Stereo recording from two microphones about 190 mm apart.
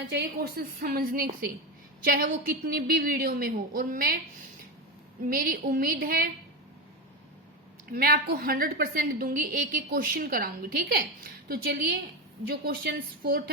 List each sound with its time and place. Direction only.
0.1 s a woman's voice: 55° right (ahead or behind)
7.9 s a woman's voice: 50° right (ahead or behind)